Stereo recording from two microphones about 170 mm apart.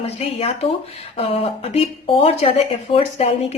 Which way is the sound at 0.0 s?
35° left (ahead or behind).